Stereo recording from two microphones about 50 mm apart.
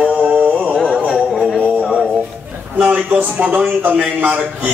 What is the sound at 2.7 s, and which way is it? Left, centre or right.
Speech, right.